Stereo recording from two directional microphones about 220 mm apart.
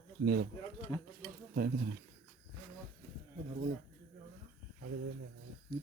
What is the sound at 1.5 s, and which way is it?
Speech, 40° right (ahead or behind).